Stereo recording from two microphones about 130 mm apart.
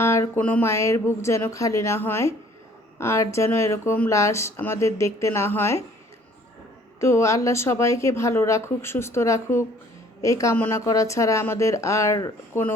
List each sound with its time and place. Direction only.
0.0 s speech: 20° left (ahead or behind)
7.0 s speech: 20° left (ahead or behind)